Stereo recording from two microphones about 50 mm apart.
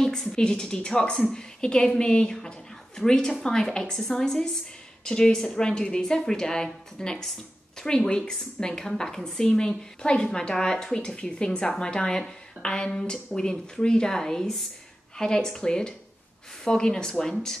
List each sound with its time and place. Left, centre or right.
0.0 s speech: centre